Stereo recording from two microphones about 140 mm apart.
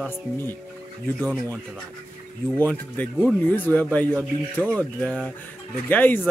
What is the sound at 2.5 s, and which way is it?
Speech, 15° left (ahead or behind).